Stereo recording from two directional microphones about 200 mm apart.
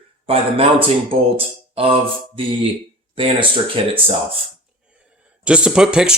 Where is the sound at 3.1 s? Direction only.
25° right (ahead or behind).